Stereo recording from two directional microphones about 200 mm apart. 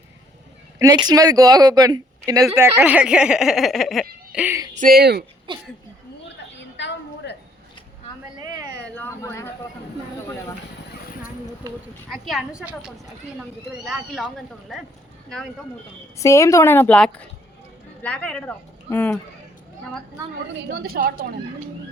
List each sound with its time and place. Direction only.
0.8 s speech: 20° right (ahead or behind)
4.7 s speech: 45° right (ahead or behind)
5.5 s speech: 25° right (ahead or behind)
6.2 s a sound: 60° left (ahead or behind)
8.4 s a sound: 15° right (ahead or behind)
9.0 s a sound: 10° left (ahead or behind)
12.1 s a woman's voice: centre (ahead or behind)
16.1 s a woman's voice: 15° left (ahead or behind)
20.7 s speech: 50° right (ahead or behind)